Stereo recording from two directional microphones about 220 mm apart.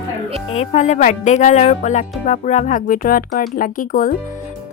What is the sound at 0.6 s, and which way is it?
Speech, 35° left (ahead or behind).